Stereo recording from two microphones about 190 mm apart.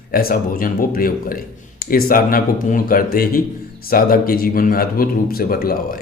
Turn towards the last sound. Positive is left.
turn(degrees=50)  # may be behind; listen again after turning